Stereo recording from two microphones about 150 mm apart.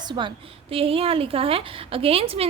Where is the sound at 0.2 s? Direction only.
30° right (ahead or behind).